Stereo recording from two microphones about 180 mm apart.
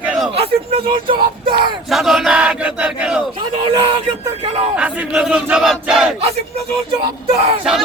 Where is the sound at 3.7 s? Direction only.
30° right (ahead or behind).